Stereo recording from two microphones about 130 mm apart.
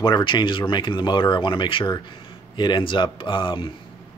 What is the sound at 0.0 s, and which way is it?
Speech, 35° left (ahead or behind).